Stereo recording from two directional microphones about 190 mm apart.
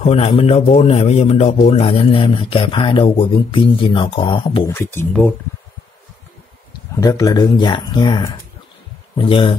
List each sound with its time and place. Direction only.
0.0 s a man's voice: 30° left (ahead or behind)
4.6 s speech: 10° left (ahead or behind)
7.0 s a man's voice: 15° left (ahead or behind)